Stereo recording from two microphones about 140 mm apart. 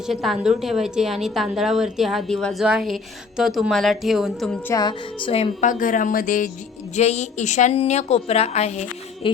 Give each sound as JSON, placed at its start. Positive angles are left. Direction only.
{"t": 0.1, "sound": "a woman's voice", "side_deg": 0}
{"t": 4.7, "sound": "music", "side_deg": 30}
{"t": 5.3, "sound": "a woman's voice", "side_deg": 45}
{"t": 5.6, "sound": "speech", "side_deg": 70}
{"t": 6.9, "sound": "a woman's voice", "side_deg": 50}
{"t": 9.2, "sound": "a sound", "side_deg": 40}